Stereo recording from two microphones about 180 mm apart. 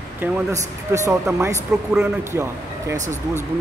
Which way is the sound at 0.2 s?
15° right (ahead or behind).